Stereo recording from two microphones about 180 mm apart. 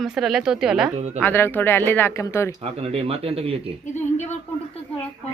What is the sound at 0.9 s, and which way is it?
Speech, 40° right (ahead or behind).